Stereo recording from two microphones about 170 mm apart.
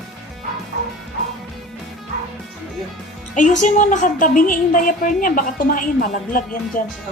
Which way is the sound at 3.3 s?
45° left (ahead or behind).